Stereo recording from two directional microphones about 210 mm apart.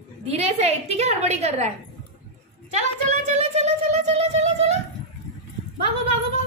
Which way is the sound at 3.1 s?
30° right (ahead or behind).